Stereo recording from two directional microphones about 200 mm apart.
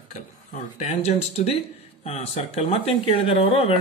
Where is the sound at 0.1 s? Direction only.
40° left (ahead or behind).